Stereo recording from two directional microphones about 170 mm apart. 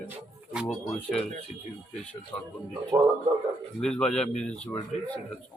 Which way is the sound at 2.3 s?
5° left (ahead or behind).